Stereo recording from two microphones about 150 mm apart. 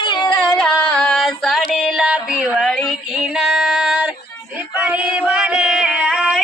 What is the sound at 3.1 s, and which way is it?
Female singing, 5° right (ahead or behind).